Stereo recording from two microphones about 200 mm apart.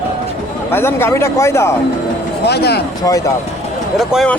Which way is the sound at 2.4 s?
55° left (ahead or behind).